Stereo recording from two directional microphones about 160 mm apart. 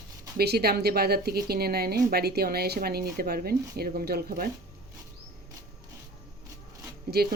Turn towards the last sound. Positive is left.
turn(degrees=-75)  # may be behind; listen again after turning